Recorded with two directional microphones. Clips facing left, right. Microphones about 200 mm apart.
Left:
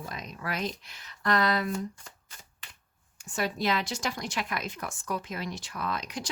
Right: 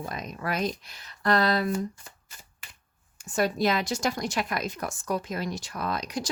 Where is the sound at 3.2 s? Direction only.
45° right (ahead or behind).